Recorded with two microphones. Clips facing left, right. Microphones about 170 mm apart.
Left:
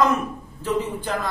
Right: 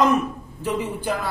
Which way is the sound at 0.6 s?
10° right (ahead or behind).